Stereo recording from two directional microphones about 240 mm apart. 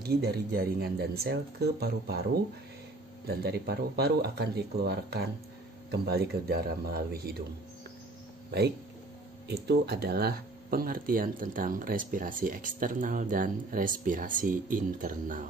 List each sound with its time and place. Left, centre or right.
0.0 s speech: right
3.3 s speech: right
9.5 s speech: right